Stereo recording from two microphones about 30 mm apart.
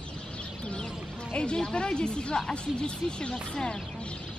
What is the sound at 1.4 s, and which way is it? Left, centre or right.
A woman's voice, left.